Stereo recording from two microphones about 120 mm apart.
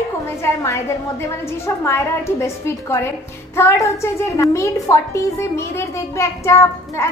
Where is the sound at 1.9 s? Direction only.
20° left (ahead or behind).